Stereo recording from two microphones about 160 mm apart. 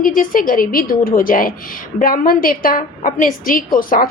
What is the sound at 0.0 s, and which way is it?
A woman's voice, 60° left (ahead or behind).